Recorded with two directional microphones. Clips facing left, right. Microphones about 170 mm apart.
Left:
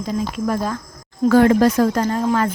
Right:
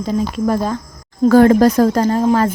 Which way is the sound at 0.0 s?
30° right (ahead or behind).